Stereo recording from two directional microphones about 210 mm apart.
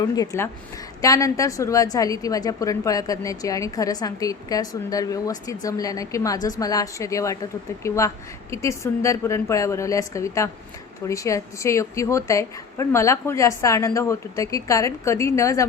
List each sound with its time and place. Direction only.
0.0 s a woman's voice: 15° left (ahead or behind)